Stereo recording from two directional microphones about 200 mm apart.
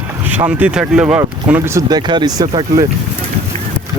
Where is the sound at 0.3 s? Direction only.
10° right (ahead or behind).